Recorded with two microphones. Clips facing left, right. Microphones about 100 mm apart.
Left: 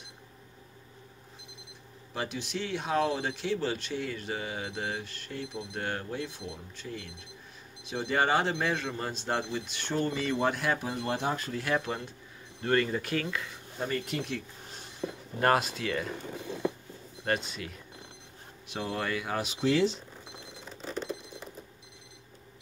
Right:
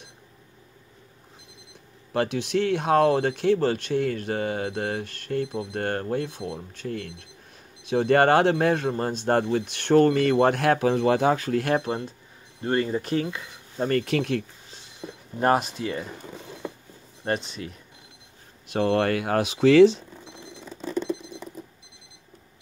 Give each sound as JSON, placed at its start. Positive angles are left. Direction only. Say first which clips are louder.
{"t": 2.1, "sound": "speech", "louder": "right 11 dB", "side_deg": -65}
{"t": 11.8, "sound": "speech", "louder": "right 6 dB", "side_deg": -35}
{"t": 13.8, "sound": "speech", "louder": "right 9 dB", "side_deg": -80}
{"t": 15.0, "sound": "a sound", "louder": "left 3 dB", "side_deg": -10}
{"t": 15.3, "sound": "speech", "louder": "right 4 dB", "side_deg": -20}
{"t": 17.2, "sound": "speech", "louder": "right 3 dB", "side_deg": -25}
{"t": 18.7, "sound": "speech", "louder": "right 11 dB", "side_deg": -60}